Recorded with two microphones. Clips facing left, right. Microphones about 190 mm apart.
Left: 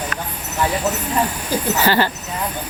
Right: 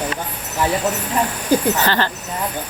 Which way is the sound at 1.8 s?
10° left (ahead or behind).